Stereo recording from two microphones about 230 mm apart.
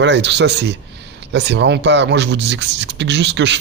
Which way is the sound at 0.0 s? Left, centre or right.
Right.